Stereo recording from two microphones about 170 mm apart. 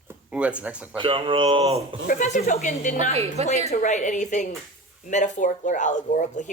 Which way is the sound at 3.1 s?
40° right (ahead or behind).